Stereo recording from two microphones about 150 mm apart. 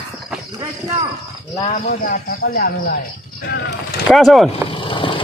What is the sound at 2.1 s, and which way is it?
Speech, 80° left.